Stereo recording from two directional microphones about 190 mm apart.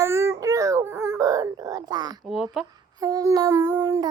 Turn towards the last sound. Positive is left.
turn(degrees=-20)  # may be behind; listen again after turning